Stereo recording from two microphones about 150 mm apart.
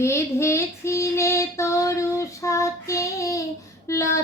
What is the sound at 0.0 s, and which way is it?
Child singing, 20° left (ahead or behind).